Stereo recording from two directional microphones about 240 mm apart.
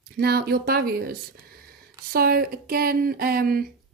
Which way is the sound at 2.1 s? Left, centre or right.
Right.